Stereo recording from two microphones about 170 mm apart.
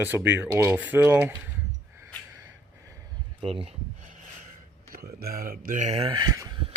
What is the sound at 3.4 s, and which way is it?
Speech, 35° right (ahead or behind).